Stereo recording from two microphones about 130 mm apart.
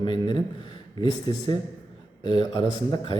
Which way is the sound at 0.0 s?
35° left (ahead or behind).